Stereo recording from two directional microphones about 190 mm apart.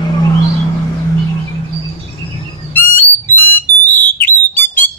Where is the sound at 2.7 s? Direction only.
10° left (ahead or behind).